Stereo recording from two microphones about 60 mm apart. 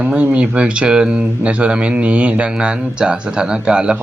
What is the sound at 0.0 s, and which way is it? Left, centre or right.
Speech, right.